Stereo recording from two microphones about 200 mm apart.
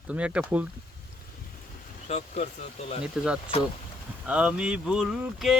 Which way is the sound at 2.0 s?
35° left (ahead or behind).